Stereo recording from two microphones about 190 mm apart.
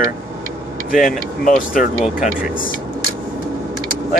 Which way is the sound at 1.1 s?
45° left (ahead or behind).